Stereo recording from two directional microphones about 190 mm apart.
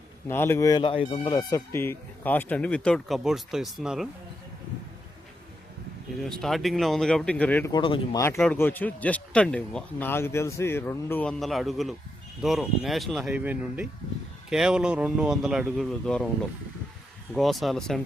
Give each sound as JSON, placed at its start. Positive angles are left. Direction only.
{"t": 0.3, "sound": "speech", "side_deg": 10}
{"t": 6.1, "sound": "speech", "side_deg": 5}
{"t": 7.7, "sound": "speech", "side_deg": 25}
{"t": 8.4, "sound": "speech", "side_deg": 10}
{"t": 17.3, "sound": "speech", "side_deg": 0}